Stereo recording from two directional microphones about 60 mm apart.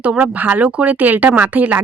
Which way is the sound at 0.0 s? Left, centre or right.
Right.